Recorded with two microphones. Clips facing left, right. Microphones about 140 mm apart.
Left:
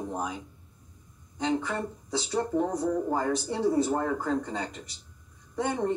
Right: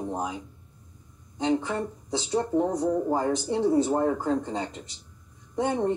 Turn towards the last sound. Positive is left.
turn(degrees=-20)  # may be behind; listen again after turning